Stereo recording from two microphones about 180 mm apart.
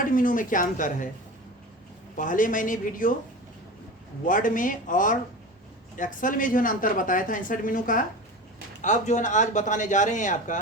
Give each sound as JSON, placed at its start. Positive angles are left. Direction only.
{"t": 0.1, "sound": "speech", "side_deg": 50}
{"t": 2.1, "sound": "speech", "side_deg": 45}
{"t": 4.3, "sound": "speech", "side_deg": 50}